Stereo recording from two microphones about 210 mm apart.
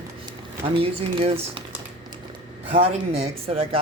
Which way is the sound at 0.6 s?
25° right (ahead or behind).